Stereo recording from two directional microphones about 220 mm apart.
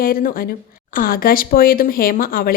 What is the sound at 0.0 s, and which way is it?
A woman's voice, 40° left (ahead or behind).